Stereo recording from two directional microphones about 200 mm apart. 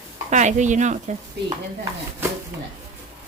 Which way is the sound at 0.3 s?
35° right (ahead or behind).